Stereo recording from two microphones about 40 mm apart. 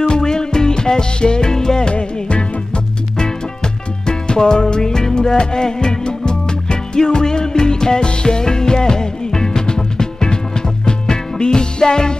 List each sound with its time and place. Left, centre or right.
0.1 s music: centre